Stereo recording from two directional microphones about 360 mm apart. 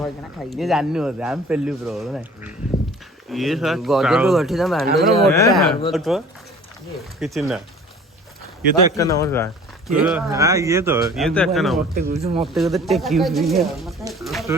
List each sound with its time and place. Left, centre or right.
0.0 s speech: centre
8.9 s speech: centre
11.9 s speech: right
12.5 s speech: centre